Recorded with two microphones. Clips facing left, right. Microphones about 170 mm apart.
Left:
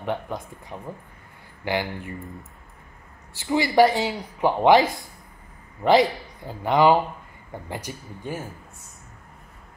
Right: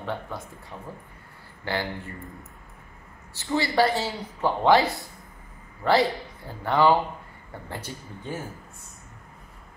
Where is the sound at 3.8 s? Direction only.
15° left (ahead or behind).